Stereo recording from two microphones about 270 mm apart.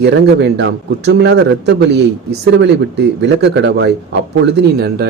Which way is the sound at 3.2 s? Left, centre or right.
Right.